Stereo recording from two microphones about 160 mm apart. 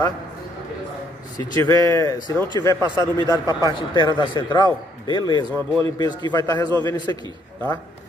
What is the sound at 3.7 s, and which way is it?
A man's voice, 25° left (ahead or behind).